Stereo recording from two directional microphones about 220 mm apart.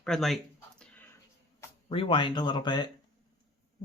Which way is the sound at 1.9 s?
25° left (ahead or behind).